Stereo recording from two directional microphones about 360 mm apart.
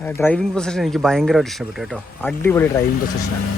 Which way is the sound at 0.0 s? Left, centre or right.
Centre.